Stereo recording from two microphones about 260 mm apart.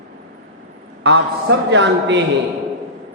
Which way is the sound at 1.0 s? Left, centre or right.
Right.